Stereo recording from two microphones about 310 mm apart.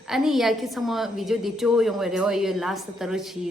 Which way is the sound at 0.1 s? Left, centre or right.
Centre.